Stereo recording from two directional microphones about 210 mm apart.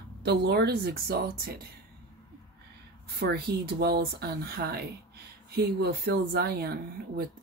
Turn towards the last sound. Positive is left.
turn(degrees=-50)  # may be behind; listen again after turning